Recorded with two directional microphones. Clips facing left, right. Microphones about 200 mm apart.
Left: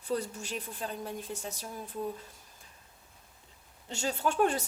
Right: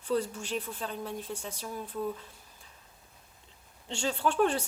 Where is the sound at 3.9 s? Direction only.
40° left (ahead or behind).